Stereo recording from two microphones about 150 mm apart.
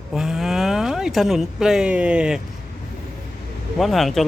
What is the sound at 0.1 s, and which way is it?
Speech, 5° right (ahead or behind).